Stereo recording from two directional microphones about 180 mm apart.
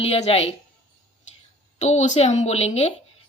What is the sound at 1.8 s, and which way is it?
A woman's voice, 40° left (ahead or behind).